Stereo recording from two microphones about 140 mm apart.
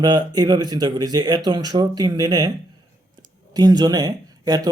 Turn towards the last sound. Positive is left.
turn(degrees=-25)  # may be behind; listen again after turning